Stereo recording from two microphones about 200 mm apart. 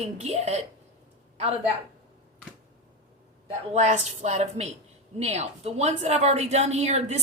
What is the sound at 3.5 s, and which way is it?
A woman's voice, 35° right (ahead or behind).